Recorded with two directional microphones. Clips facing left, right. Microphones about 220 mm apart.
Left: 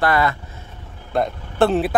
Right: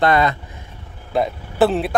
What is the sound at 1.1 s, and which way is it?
Speech, centre (ahead or behind).